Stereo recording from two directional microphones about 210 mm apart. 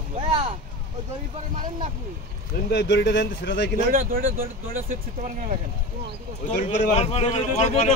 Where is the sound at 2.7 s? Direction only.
60° left (ahead or behind).